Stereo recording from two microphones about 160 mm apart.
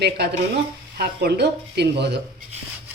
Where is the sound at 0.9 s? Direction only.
85° right.